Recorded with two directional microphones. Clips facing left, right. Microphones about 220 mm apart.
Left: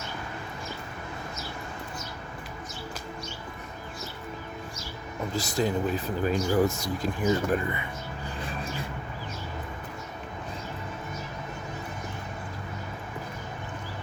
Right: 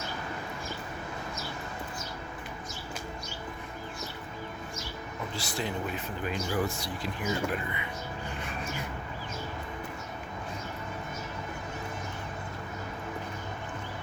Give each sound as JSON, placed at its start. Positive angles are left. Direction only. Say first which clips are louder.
{"t": 5.3, "sound": "speech", "louder": "left 8 dB", "side_deg": 40}